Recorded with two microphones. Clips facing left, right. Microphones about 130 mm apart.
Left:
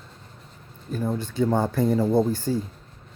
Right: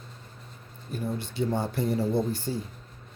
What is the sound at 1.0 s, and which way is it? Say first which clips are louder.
A man's voice: left 5 dB; 45° left (ahead or behind).